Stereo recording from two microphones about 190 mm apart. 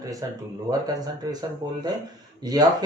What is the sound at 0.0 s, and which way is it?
Speech, 20° right (ahead or behind).